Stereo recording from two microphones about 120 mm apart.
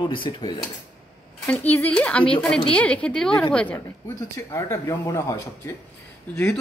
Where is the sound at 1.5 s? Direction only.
15° left (ahead or behind).